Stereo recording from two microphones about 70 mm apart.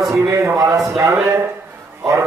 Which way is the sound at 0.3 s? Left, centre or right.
Right.